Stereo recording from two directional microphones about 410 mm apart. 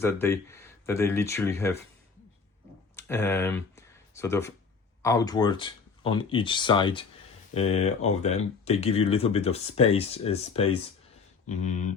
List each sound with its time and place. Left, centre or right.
0.0 s speech: centre
2.9 s a sound: centre
5.0 s speech: centre